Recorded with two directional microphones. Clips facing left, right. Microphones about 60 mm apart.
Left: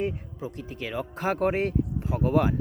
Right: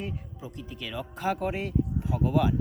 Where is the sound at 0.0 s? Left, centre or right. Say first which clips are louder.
Left 7 dB; left.